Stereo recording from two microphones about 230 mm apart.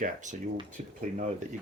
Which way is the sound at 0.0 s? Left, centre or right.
Right.